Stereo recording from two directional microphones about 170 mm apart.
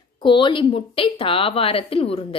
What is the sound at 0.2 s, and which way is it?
A woman's voice, 30° left (ahead or behind).